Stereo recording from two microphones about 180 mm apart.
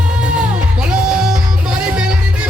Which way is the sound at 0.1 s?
5° right (ahead or behind).